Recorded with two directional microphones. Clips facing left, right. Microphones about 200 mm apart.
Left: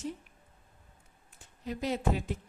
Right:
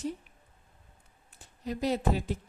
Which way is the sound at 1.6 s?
35° right (ahead or behind).